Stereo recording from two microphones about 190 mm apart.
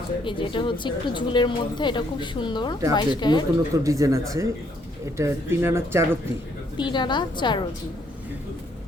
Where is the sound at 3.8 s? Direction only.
15° right (ahead or behind).